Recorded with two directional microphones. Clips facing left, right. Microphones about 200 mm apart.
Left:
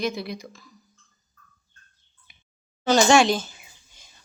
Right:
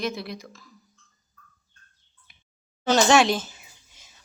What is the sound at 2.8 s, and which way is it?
Speech, 5° right (ahead or behind).